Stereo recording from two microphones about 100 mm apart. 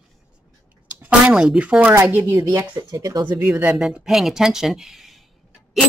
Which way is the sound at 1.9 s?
25° right (ahead or behind).